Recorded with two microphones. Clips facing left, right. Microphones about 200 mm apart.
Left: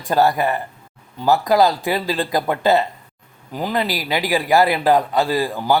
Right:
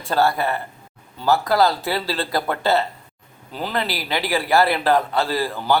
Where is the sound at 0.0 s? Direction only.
15° left (ahead or behind).